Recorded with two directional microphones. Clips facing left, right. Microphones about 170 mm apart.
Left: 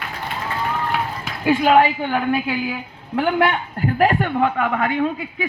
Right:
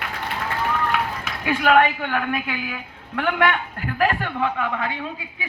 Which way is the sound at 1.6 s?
25° left (ahead or behind).